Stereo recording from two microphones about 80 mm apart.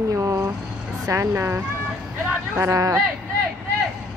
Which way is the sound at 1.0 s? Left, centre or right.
Right.